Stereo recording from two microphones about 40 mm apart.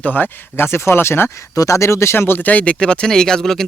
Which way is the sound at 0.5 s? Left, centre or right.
Left.